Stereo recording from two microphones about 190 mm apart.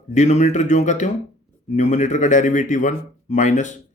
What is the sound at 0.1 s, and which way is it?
Speech, 40° left (ahead or behind).